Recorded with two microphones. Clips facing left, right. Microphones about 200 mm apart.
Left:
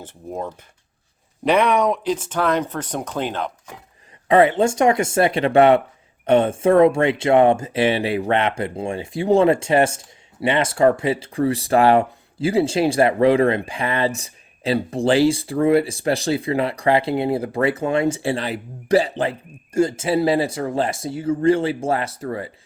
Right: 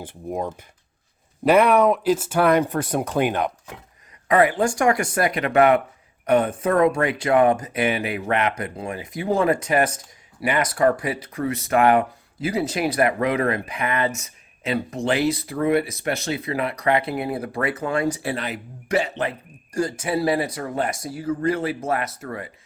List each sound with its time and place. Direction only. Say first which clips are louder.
0.0 s speech: right 2 dB; 15° right (ahead or behind)
4.3 s speech: left 3 dB; 25° left (ahead or behind)